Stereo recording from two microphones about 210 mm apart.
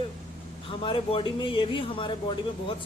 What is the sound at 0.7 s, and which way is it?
Speech, 25° left (ahead or behind).